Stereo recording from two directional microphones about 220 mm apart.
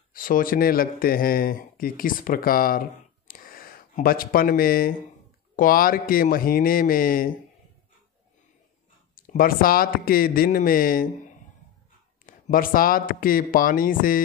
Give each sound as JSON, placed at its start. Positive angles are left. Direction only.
{"t": 0.1, "sound": "speech", "side_deg": 40}
{"t": 9.1, "sound": "speech", "side_deg": 40}